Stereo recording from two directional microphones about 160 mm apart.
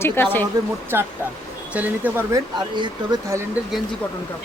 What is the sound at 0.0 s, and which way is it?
Speech, 15° left (ahead or behind).